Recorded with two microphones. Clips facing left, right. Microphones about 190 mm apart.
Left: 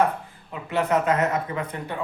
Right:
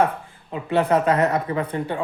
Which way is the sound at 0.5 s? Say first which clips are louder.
Right 4 dB; 30° right (ahead or behind).